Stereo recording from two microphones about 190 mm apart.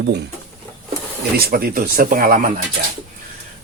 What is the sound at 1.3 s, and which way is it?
Speech, 55° right (ahead or behind).